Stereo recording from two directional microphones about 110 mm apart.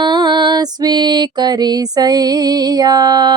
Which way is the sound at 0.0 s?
45° right (ahead or behind).